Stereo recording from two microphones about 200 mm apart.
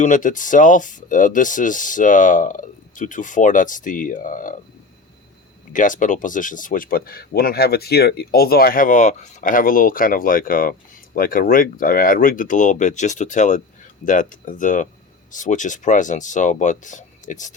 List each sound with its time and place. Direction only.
0.0 s speech: 40° left (ahead or behind)
5.7 s speech: 40° left (ahead or behind)